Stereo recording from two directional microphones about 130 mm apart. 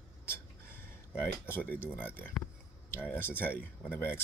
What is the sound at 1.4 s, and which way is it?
Speech, 15° left (ahead or behind).